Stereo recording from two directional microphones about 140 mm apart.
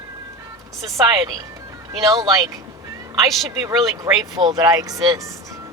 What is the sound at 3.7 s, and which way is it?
Speech, 25° right (ahead or behind).